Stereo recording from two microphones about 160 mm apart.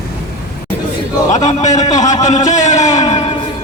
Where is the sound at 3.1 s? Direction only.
40° left (ahead or behind).